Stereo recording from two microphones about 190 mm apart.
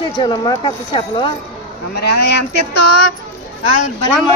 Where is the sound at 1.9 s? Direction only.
60° left (ahead or behind).